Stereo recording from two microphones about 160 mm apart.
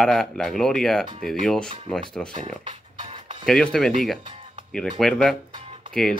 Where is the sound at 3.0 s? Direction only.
45° right (ahead or behind).